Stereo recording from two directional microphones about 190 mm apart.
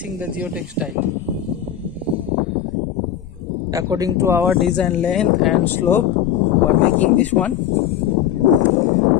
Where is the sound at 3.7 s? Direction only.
15° right (ahead or behind).